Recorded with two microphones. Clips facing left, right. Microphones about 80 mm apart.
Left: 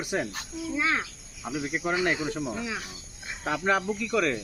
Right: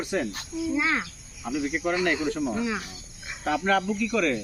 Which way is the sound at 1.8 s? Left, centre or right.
Centre.